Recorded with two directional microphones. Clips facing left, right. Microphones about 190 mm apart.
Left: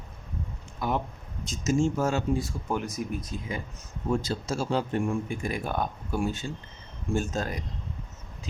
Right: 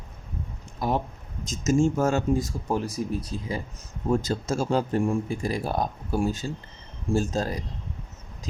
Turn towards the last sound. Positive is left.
turn(degrees=-35)  # may be behind; listen again after turning